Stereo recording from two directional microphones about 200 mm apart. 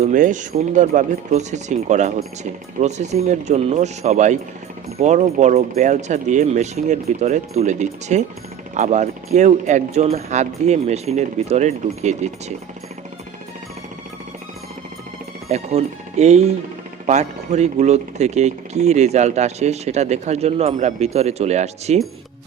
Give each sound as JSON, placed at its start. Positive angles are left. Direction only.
{"t": 0.0, "sound": "speech", "side_deg": -40}
{"t": 15.4, "sound": "speech", "side_deg": -35}